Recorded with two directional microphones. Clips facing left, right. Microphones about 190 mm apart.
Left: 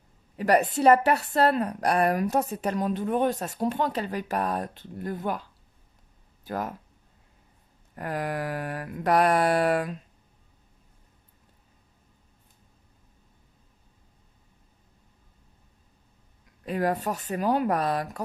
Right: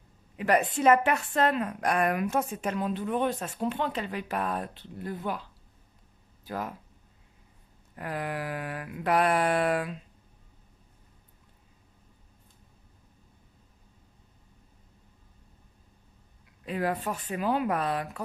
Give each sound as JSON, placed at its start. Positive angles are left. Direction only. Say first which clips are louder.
{"t": 0.4, "sound": "a woman's voice", "louder": "left 3 dB", "side_deg": 40}
{"t": 6.4, "sound": "speech", "louder": "left 3 dB", "side_deg": 45}
{"t": 7.9, "sound": "mantra", "louder": "left 3 dB", "side_deg": 45}
{"t": 16.6, "sound": "a woman's voice", "louder": "left 3 dB", "side_deg": 40}